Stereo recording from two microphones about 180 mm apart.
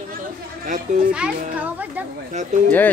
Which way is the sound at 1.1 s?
5° right (ahead or behind).